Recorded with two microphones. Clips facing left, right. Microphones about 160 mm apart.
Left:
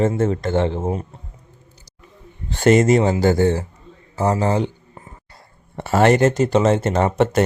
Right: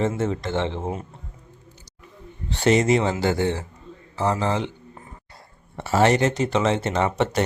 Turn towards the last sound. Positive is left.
turn(degrees=50)  # may be behind; listen again after turning